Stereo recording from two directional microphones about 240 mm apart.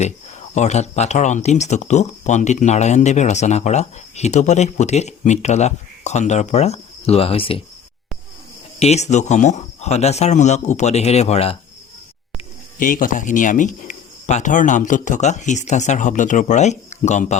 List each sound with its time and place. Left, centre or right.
0.5 s speech: left
8.8 s speech: left
12.8 s speech: left